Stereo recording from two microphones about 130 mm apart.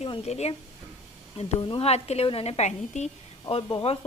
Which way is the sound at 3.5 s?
40° left (ahead or behind).